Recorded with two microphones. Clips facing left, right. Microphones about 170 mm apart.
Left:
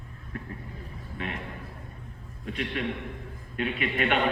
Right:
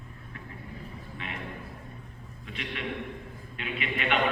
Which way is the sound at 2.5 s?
45° left (ahead or behind).